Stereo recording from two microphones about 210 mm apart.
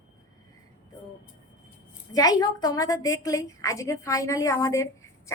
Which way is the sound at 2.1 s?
15° left (ahead or behind).